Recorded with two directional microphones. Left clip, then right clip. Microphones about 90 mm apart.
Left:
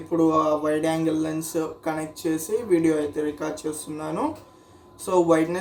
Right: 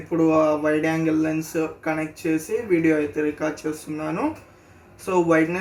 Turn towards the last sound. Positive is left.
turn(degrees=-10)  # may be behind; listen again after turning